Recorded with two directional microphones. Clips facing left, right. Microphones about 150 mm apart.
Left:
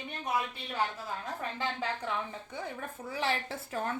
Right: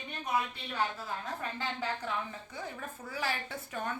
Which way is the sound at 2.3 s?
20° left (ahead or behind).